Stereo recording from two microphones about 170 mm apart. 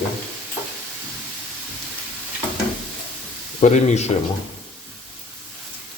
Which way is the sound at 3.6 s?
40° left (ahead or behind).